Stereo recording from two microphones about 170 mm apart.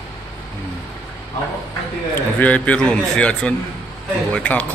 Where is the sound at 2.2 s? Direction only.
10° left (ahead or behind).